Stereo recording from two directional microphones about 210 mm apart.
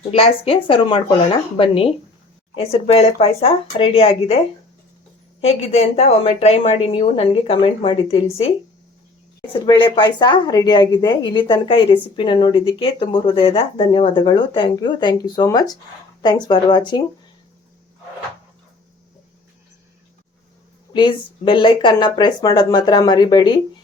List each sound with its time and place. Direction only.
0.1 s a woman's voice: 25° left (ahead or behind)
5.4 s a woman's voice: 30° left (ahead or behind)
20.9 s a woman's voice: 25° left (ahead or behind)